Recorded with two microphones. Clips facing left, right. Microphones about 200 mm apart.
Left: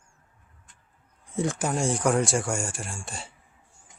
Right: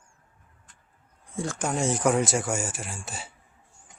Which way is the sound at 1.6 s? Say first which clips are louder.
Right 4 dB; centre (ahead or behind).